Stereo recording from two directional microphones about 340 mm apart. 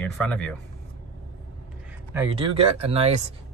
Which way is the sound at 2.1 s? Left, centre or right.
Centre.